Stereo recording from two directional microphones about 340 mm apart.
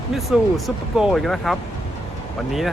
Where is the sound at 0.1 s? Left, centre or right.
Centre.